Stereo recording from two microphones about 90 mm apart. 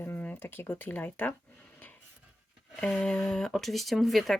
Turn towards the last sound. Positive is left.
turn(degrees=0)  # may be behind; listen again after turning